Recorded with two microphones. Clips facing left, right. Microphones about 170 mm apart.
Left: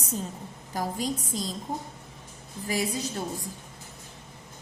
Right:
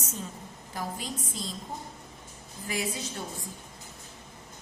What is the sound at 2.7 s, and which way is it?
Speech, 35° left (ahead or behind).